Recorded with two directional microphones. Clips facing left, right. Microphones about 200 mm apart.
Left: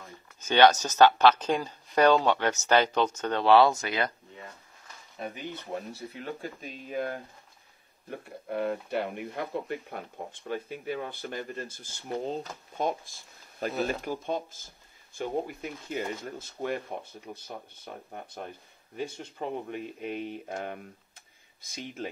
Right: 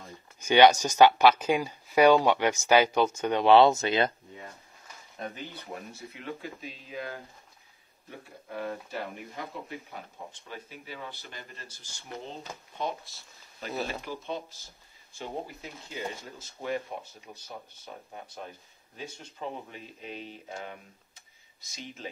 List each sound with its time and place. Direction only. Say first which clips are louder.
0.4 s speech: right 1 dB; 10° right (ahead or behind)
5.2 s speech: left 1 dB; 5° left (ahead or behind)
6.2 s speech: even; 45° left (ahead or behind)
18.9 s speech: left 6 dB; 55° left (ahead or behind)